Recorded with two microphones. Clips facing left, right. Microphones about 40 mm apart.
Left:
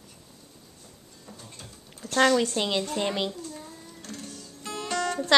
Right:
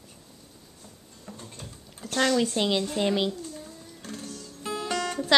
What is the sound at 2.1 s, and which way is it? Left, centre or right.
Speech, centre.